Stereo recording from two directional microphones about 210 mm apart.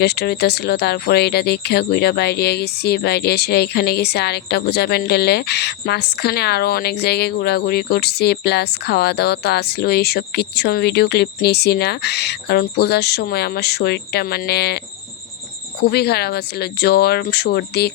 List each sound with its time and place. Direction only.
0.0 s speech: 50° left (ahead or behind)
15.8 s speech: 50° left (ahead or behind)